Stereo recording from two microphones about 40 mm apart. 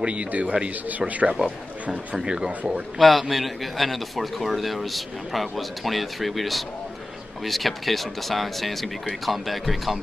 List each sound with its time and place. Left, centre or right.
0.0 s speech: right
2.2 s speech: right
3.0 s a man's voice: centre